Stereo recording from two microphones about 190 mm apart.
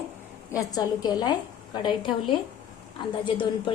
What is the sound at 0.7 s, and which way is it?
A woman's voice, 20° left (ahead or behind).